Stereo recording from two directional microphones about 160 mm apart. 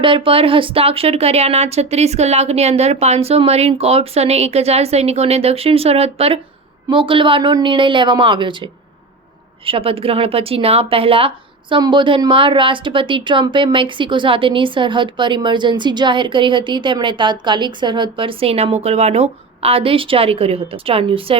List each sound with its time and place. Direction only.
0.0 s a woman's voice: 35° right (ahead or behind)
9.6 s a woman's voice: 35° right (ahead or behind)